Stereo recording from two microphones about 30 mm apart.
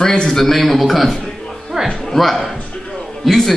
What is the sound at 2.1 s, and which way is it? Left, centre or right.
Speech, centre.